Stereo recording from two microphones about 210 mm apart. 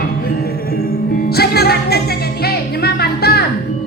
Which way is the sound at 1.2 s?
50° left (ahead or behind).